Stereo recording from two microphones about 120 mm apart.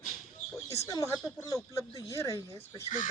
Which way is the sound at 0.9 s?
30° left (ahead or behind).